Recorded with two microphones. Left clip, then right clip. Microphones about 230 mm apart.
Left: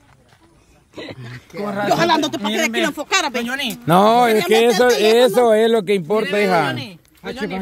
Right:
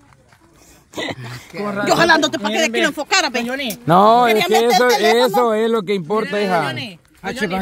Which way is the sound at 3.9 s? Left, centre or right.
Centre.